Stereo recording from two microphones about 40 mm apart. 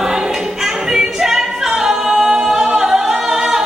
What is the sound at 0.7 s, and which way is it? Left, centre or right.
A capella, centre.